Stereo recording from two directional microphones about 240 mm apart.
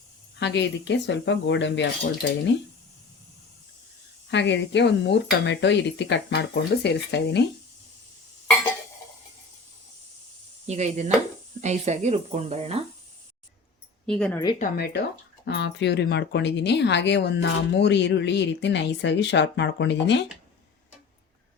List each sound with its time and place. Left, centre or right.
0.3 s speech: left
4.3 s speech: left
10.7 s speech: right
14.1 s speech: centre
14.6 s speech: left